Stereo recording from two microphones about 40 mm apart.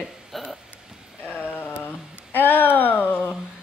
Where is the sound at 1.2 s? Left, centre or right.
Left.